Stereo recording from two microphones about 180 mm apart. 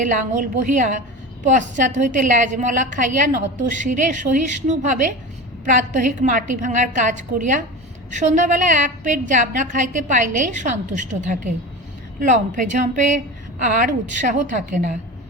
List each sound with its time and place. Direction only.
0.0 s a woman's voice: 45° right (ahead or behind)